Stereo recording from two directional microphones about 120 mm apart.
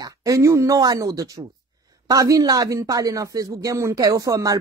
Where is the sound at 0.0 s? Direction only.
25° right (ahead or behind).